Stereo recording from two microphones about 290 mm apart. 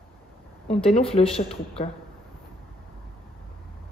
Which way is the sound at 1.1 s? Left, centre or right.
Centre.